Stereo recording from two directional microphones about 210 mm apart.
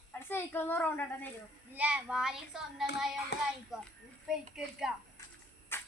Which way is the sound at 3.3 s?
55° left (ahead or behind).